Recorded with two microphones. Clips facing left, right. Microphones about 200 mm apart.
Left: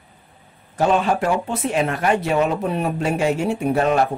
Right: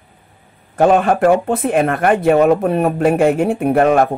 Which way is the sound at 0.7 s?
55° right (ahead or behind).